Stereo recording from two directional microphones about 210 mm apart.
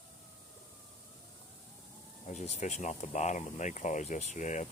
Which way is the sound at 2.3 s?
35° left (ahead or behind).